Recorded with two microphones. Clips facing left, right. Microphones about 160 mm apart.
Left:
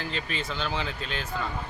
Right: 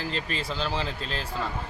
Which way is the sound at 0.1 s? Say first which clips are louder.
Right 1 dB; 35° right (ahead or behind).